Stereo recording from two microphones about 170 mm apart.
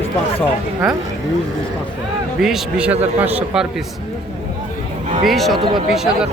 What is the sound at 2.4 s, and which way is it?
A man's voice, centre (ahead or behind).